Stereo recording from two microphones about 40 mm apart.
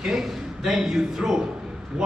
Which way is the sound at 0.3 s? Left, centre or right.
Centre.